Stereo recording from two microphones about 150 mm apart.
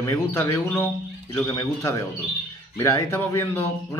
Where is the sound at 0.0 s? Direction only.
15° left (ahead or behind).